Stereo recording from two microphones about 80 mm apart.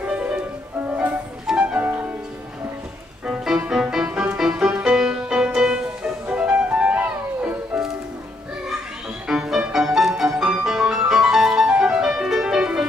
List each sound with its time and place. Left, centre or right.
0.0 s music: centre
3.3 s music: centre
9.3 s music: centre